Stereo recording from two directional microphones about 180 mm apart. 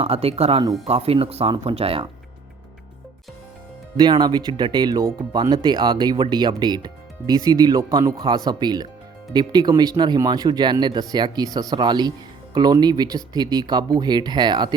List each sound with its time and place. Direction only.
0.0 s speech: 35° right (ahead or behind)
3.9 s speech: 25° right (ahead or behind)